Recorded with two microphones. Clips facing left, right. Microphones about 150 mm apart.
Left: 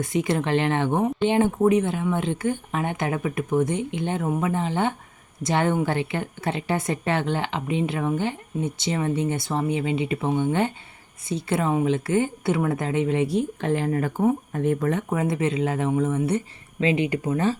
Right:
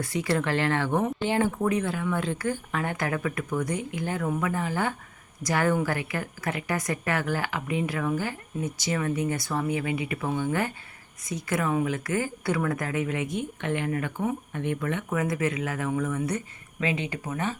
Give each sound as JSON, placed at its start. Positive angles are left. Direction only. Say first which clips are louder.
{"t": 0.0, "sound": "a woman's voice", "louder": "left 3 dB", "side_deg": 20}